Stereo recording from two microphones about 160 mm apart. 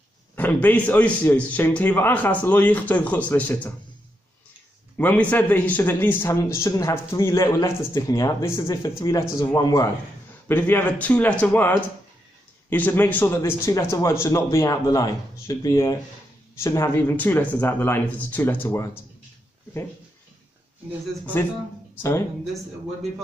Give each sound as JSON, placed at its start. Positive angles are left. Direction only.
{"t": 0.4, "sound": "a man's voice", "side_deg": 10}
{"t": 4.9, "sound": "a man's voice", "side_deg": 10}
{"t": 21.3, "sound": "a man's voice", "side_deg": 15}